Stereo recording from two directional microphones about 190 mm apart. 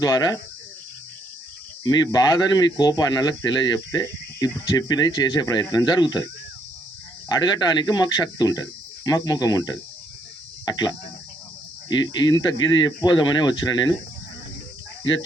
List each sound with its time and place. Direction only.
0.0 s speech: 20° left (ahead or behind)
1.8 s speech: 20° left (ahead or behind)
7.3 s speech: 20° left (ahead or behind)